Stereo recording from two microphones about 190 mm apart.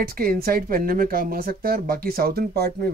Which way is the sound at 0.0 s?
50° right (ahead or behind).